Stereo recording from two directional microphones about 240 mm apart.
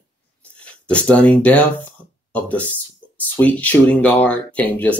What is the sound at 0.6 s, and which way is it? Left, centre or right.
Speech, centre.